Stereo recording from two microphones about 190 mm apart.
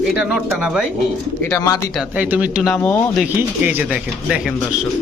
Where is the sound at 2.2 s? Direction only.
5° right (ahead or behind); by 3.2 s 10° left (ahead or behind).